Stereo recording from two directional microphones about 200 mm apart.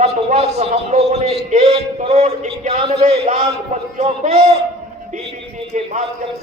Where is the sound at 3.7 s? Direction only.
40° right (ahead or behind).